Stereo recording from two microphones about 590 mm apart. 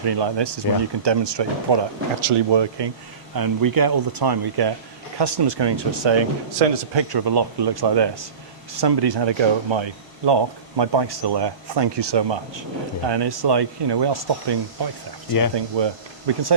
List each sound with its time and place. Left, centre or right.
0.0 s speech: right
3.3 s speech: right